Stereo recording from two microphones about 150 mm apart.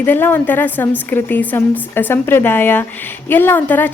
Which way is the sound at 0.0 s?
15° left (ahead or behind).